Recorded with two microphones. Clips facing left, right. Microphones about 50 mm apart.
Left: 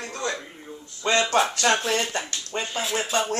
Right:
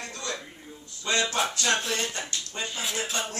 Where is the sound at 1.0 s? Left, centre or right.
Left.